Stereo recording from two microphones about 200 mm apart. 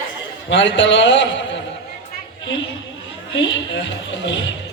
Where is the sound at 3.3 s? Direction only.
65° left (ahead or behind).